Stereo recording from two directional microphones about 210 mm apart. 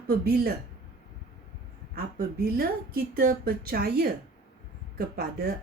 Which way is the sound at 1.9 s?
45° right (ahead or behind).